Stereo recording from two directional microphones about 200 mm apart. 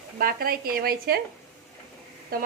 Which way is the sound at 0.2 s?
45° right (ahead or behind).